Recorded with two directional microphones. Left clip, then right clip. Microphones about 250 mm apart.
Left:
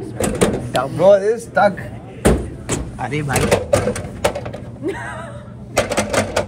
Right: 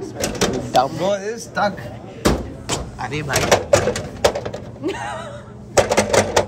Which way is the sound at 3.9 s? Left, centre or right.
Right.